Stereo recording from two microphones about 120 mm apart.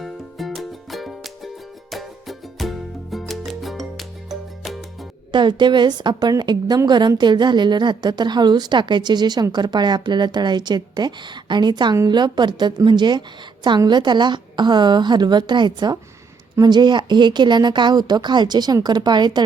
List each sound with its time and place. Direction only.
0.0 s music: centre (ahead or behind)
5.3 s a woman's voice: 40° right (ahead or behind)